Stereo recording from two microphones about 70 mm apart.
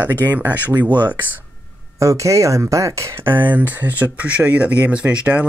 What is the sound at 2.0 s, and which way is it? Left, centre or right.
Speech, right.